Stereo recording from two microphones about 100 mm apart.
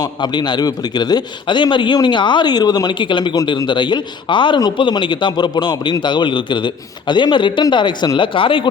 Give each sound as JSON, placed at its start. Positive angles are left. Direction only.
{"t": 0.0, "sound": "a man's voice", "side_deg": 50}